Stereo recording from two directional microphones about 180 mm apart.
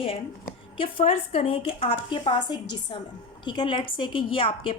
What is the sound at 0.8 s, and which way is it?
A woman's voice, 35° left (ahead or behind).